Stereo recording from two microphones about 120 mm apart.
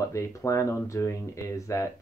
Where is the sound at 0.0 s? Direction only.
25° left (ahead or behind).